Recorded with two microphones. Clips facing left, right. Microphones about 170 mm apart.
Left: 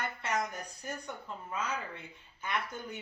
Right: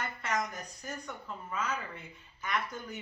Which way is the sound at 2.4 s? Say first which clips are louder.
Right 1 dB; 30° left (ahead or behind).